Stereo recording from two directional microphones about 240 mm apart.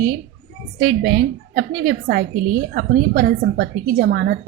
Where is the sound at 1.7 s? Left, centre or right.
Right.